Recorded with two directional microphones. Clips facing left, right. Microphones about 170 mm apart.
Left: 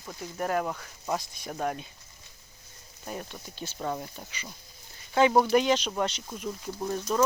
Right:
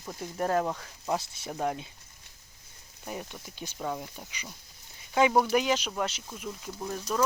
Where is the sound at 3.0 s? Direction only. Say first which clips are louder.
Left 1 dB; 15° right (ahead or behind).